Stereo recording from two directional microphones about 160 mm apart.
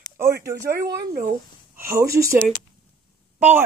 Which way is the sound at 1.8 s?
15° right (ahead or behind).